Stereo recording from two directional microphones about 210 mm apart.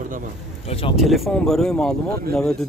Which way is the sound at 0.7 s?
25° left (ahead or behind).